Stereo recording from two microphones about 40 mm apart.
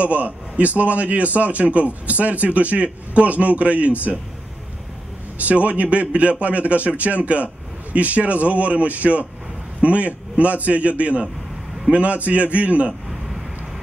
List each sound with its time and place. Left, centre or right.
0.0 s a man's voice: right
5.5 s a man's voice: right